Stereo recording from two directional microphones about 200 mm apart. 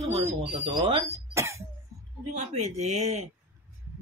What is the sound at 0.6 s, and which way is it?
Speech, 25° right (ahead or behind).